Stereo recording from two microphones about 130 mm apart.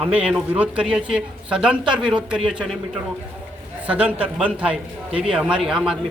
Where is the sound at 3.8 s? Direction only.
10° right (ahead or behind).